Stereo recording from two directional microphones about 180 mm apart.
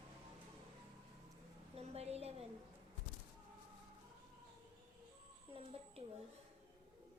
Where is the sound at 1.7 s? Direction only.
35° right (ahead or behind).